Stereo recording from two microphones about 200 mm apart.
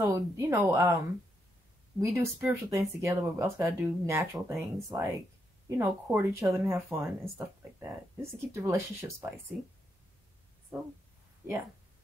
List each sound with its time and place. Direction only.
0.0 s speech: 15° right (ahead or behind)
9.5 s speech: centre (ahead or behind)
10.7 s speech: 5° right (ahead or behind)